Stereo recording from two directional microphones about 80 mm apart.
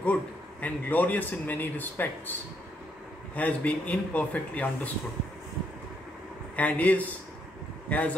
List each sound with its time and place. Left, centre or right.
0.0 s a man's voice: centre
3.3 s a man's voice: centre
6.5 s a man's voice: centre